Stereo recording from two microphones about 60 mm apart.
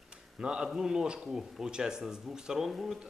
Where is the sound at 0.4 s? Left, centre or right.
Centre.